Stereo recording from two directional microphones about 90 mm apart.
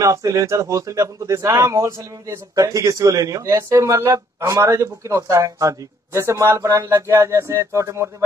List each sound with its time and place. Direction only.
0.0 s a man's voice: 40° right (ahead or behind)